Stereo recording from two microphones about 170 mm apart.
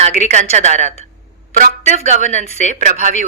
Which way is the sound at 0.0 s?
45° right (ahead or behind).